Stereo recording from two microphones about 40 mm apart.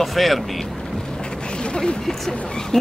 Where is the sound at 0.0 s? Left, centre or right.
Centre.